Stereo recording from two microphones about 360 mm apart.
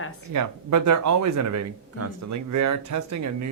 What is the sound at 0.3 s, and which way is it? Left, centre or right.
Speech, right.